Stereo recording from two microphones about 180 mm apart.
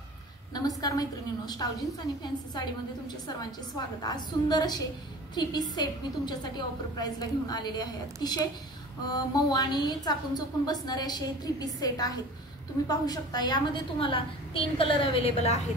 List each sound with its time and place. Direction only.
0.6 s a woman's voice: 20° left (ahead or behind)
4.0 s a woman's voice: 20° left (ahead or behind)